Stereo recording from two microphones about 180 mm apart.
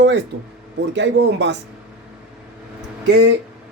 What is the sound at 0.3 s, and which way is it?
Speech, 90° right.